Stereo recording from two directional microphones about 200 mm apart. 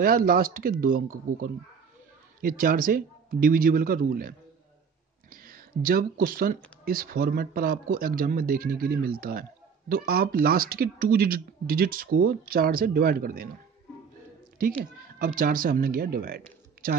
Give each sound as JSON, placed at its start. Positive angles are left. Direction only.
{"t": 0.0, "sound": "speech", "side_deg": -45}
{"t": 5.3, "sound": "speech", "side_deg": -45}
{"t": 15.1, "sound": "speech", "side_deg": -45}